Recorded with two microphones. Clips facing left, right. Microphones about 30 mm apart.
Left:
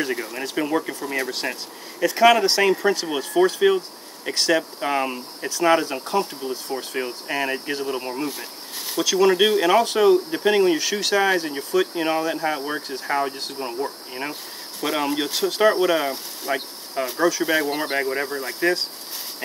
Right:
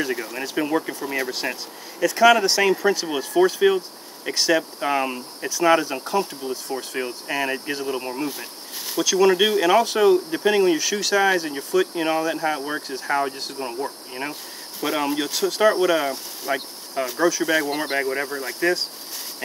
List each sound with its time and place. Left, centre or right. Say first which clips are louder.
0.0 s speech: even; centre
2.0 s speech: even; centre